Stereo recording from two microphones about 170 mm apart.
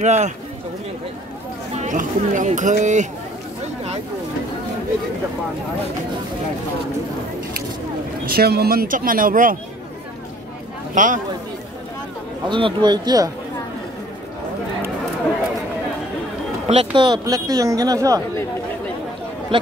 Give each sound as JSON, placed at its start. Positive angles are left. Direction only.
{"t": 0.0, "sound": "speech", "side_deg": -45}
{"t": 1.8, "sound": "speech", "side_deg": -50}
{"t": 8.3, "sound": "speech", "side_deg": -70}
{"t": 11.0, "sound": "speech", "side_deg": -50}
{"t": 12.4, "sound": "speech", "side_deg": -30}
{"t": 16.6, "sound": "speech", "side_deg": -40}
{"t": 17.0, "sound": "speech", "side_deg": -25}
{"t": 19.5, "sound": "speech", "side_deg": -30}